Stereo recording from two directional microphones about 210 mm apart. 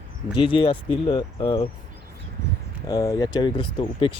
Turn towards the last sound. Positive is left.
turn(degrees=25)  # may be behind; listen again after turning